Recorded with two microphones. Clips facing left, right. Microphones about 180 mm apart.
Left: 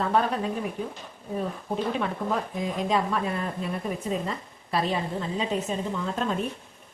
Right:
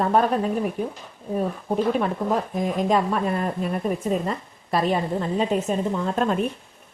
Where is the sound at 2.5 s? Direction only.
50° right (ahead or behind).